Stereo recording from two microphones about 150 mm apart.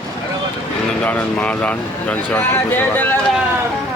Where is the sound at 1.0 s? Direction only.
10° left (ahead or behind).